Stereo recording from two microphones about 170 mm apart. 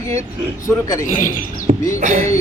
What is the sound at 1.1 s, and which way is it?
Speech, 50° left (ahead or behind).